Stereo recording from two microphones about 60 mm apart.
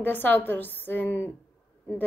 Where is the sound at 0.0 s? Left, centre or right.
Left.